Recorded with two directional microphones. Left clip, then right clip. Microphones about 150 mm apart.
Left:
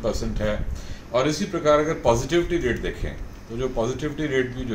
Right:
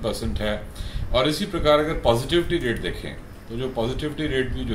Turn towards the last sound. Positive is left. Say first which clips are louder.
# left 1 dB
turn(degrees=5)  # may be behind; listen again after turning